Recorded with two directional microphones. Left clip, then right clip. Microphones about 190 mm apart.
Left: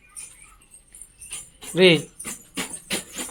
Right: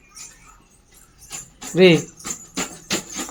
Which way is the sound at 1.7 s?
5° right (ahead or behind).